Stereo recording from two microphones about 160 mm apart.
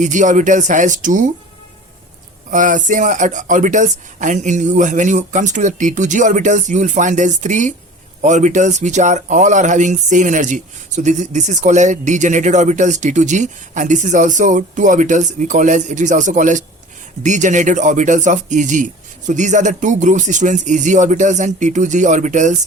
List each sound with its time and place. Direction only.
0.0 s speech: 50° right (ahead or behind)
2.5 s speech: 50° right (ahead or behind)